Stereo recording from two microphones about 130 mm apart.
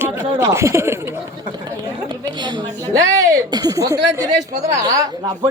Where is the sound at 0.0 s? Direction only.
20° right (ahead or behind).